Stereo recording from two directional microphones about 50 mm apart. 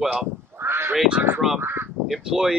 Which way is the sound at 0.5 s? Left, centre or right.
Right.